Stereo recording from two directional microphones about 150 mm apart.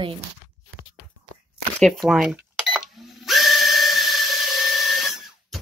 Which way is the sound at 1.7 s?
Centre (ahead or behind).